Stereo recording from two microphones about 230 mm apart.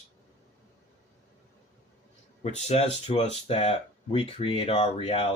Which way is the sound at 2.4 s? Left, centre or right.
Left.